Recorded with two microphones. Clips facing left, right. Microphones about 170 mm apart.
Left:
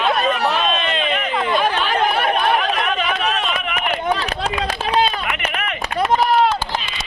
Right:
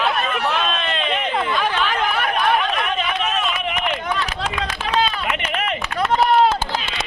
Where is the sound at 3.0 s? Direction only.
35° left (ahead or behind).